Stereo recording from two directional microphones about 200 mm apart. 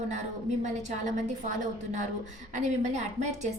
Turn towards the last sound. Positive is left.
turn(degrees=-35)  # may be behind; listen again after turning